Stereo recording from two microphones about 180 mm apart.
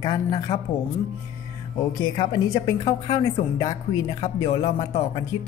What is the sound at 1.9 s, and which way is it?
A woman's voice, 25° left (ahead or behind).